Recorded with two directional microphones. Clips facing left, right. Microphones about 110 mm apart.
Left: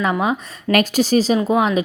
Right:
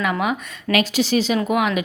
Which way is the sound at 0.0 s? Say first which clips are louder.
Left 2 dB; 30° left (ahead or behind).